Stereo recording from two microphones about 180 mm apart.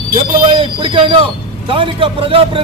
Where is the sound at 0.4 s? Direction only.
30° right (ahead or behind).